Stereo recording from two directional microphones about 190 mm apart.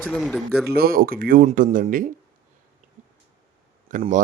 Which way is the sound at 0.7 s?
50° right (ahead or behind).